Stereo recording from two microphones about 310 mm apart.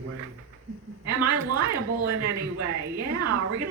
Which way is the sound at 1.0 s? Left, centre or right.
Right.